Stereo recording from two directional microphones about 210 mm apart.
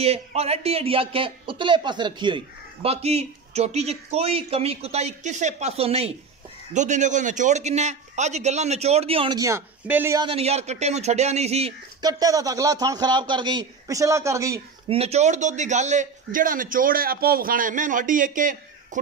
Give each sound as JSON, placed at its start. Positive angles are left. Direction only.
{"t": 0.0, "sound": "a man's voice", "side_deg": -30}
{"t": 10.2, "sound": "a man's voice", "side_deg": -30}
{"t": 12.0, "sound": "a man's voice", "side_deg": -20}
{"t": 14.9, "sound": "a man's voice", "side_deg": -30}